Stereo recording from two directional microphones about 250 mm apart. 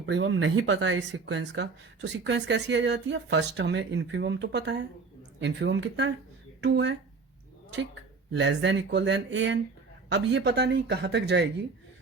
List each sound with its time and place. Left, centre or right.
0.0 s speech: right
8.3 s speech: right